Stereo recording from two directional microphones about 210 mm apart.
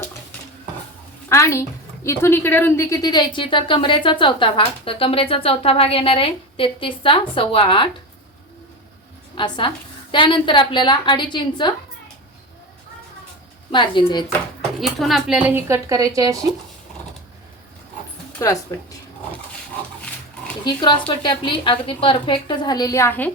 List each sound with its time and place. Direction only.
1.3 s a woman's voice: 15° left (ahead or behind)
9.3 s a woman's voice: 25° left (ahead or behind)
13.7 s a woman's voice: 20° left (ahead or behind)
14.8 s speech: centre (ahead or behind); by 16.4 s 15° right (ahead or behind)
18.3 s speech: 15° left (ahead or behind)
20.7 s a woman's voice: 20° left (ahead or behind)